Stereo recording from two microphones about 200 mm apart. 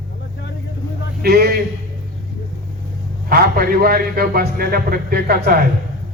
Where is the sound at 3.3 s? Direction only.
50° right (ahead or behind).